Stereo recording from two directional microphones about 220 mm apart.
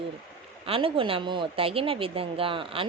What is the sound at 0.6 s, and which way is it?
Speech, 25° right (ahead or behind).